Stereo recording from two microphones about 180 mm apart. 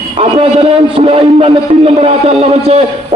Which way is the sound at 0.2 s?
30° right (ahead or behind).